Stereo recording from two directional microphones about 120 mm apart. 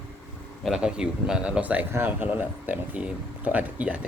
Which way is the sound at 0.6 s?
5° right (ahead or behind).